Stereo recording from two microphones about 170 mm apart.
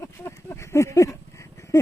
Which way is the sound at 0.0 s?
15° left (ahead or behind).